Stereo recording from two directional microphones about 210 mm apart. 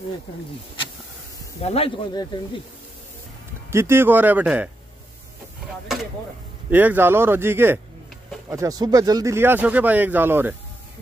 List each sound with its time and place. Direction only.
1.6 s speech: 30° left (ahead or behind)
3.7 s speech: 10° right (ahead or behind)
6.7 s speech: 10° right (ahead or behind)